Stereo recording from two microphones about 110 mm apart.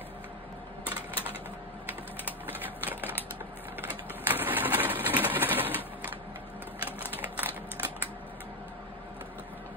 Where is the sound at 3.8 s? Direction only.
15° right (ahead or behind).